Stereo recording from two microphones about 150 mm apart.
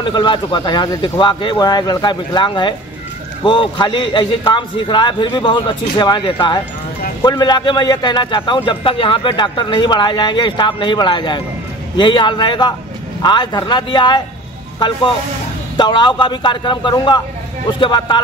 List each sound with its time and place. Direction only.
0.0 s a man's voice: 30° left (ahead or behind)
15.8 s a man's voice: 30° left (ahead or behind)